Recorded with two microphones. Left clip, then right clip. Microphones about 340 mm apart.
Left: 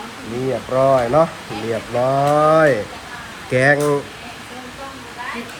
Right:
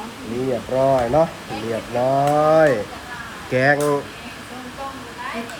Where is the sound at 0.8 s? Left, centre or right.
Left.